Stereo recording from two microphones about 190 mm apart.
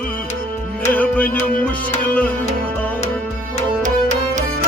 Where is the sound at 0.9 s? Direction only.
10° left (ahead or behind).